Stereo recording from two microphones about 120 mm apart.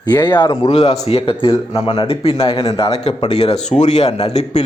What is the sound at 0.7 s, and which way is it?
A man's voice, 55° left (ahead or behind).